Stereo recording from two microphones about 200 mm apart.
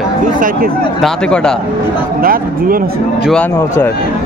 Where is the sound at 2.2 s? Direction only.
45° right (ahead or behind).